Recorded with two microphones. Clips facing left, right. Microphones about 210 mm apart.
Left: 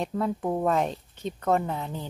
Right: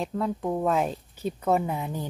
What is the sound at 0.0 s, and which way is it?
Speech, centre (ahead or behind).